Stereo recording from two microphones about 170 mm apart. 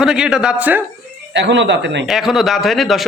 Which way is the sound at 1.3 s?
90° right.